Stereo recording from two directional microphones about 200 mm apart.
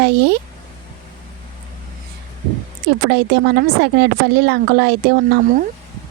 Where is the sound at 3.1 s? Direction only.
55° right (ahead or behind).